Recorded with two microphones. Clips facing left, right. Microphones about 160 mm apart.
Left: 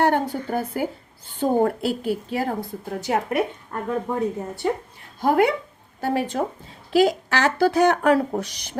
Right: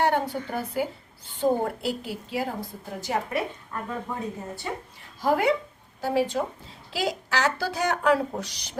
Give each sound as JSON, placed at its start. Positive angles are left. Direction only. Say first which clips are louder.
{"t": 0.0, "sound": "speech", "louder": "left 4 dB", "side_deg": 45}
{"t": 5.2, "sound": "speech", "louder": "left 4 dB", "side_deg": 60}